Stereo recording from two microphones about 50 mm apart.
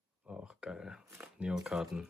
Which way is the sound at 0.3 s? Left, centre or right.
Centre.